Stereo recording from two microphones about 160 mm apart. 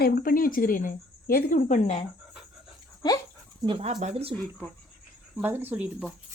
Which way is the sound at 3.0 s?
25° left (ahead or behind).